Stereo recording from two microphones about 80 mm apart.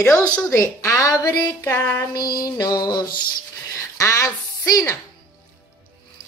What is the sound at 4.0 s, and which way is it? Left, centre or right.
Speech, left.